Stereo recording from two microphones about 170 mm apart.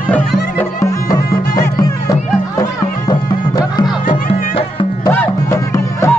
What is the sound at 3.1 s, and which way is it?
Music, 25° left (ahead or behind).